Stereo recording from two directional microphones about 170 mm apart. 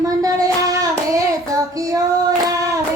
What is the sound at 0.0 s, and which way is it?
Child singing, 20° right (ahead or behind).